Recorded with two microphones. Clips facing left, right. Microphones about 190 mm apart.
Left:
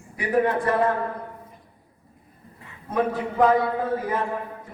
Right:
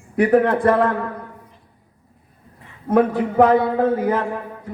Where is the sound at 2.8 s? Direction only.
60° right (ahead or behind).